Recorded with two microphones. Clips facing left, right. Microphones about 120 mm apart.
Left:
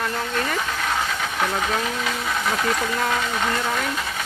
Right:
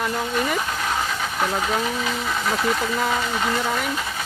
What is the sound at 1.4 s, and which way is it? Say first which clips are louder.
Speech: right 1 dB; centre (ahead or behind).